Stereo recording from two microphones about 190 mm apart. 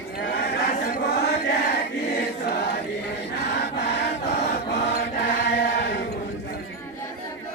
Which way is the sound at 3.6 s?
65° left (ahead or behind).